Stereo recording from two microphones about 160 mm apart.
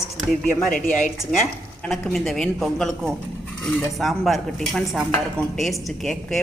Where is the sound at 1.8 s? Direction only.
Centre (ahead or behind).